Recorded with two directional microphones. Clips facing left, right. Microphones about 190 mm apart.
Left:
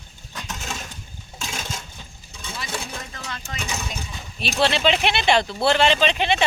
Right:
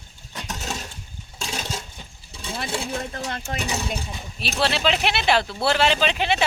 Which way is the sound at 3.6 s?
35° right (ahead or behind).